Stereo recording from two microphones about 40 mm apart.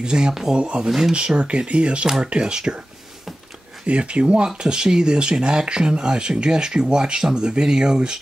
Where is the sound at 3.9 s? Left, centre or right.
Right.